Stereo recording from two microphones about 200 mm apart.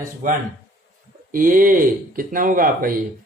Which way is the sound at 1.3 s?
45° right (ahead or behind).